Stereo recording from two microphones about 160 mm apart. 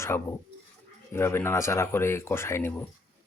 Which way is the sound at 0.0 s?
15° left (ahead or behind).